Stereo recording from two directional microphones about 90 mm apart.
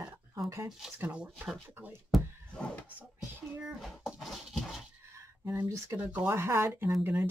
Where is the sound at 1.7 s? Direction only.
25° right (ahead or behind).